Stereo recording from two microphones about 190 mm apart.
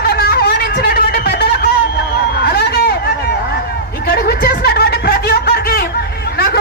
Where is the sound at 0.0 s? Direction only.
55° left (ahead or behind).